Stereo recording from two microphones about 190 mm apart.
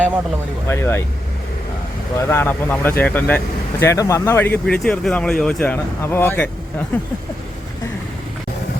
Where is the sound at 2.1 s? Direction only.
10° left (ahead or behind).